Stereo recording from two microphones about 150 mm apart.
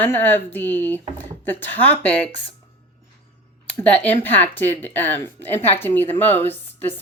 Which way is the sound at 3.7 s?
10° left (ahead or behind).